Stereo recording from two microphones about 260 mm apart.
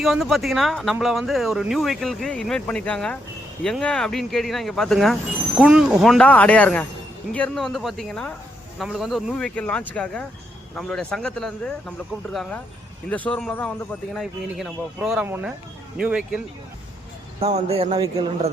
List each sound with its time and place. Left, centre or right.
0.0 s speech: centre
17.4 s a man's voice: right